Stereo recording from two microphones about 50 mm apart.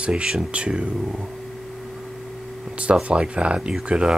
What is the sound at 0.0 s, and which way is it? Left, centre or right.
Speech, centre.